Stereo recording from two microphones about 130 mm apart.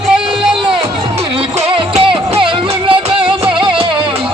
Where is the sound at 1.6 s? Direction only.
50° right (ahead or behind).